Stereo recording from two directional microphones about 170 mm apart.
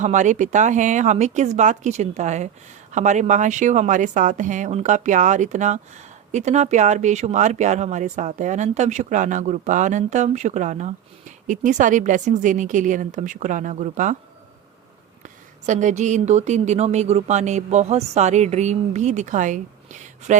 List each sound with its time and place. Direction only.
0.0 s speech: 45° right (ahead or behind)
15.2 s speech: 45° right (ahead or behind)